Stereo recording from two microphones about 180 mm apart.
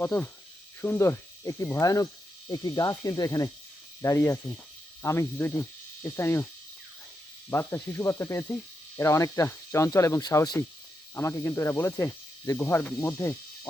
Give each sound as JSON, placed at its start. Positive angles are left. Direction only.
{"t": 0.0, "sound": "speech", "side_deg": 10}
{"t": 7.5, "sound": "speech", "side_deg": 15}